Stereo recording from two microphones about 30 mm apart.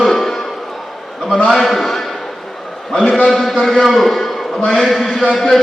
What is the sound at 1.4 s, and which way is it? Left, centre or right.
Speech, centre.